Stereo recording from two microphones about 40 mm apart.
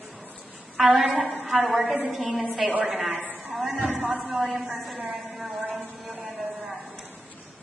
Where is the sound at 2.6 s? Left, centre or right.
Right.